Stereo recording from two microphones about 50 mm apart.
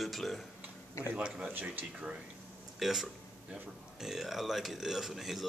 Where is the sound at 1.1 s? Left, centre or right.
Right.